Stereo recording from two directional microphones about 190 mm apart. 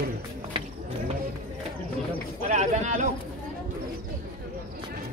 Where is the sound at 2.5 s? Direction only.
40° right (ahead or behind).